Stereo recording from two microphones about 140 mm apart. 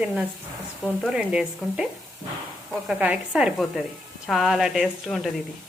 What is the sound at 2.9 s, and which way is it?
A woman's voice, 10° right (ahead or behind).